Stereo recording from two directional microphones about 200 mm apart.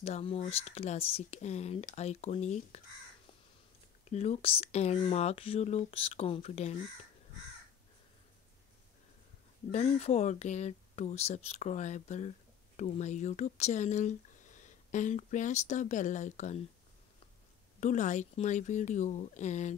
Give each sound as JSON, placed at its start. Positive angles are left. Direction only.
{"t": 0.0, "sound": "speech", "side_deg": 30}
{"t": 4.1, "sound": "speech", "side_deg": 35}
{"t": 9.7, "sound": "speech", "side_deg": 30}
{"t": 17.7, "sound": "speech", "side_deg": 35}